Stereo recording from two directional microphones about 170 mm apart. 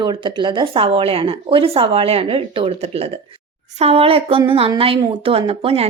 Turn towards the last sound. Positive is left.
turn(degrees=-35)  # may be behind; listen again after turning